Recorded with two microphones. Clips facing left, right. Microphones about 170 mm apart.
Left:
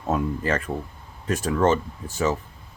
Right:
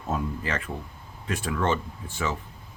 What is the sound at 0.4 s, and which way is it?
Speech, 45° left (ahead or behind).